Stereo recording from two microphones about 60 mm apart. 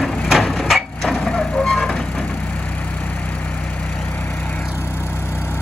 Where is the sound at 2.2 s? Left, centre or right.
Left.